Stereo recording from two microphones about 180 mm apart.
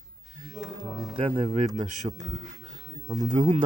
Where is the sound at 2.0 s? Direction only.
20° right (ahead or behind).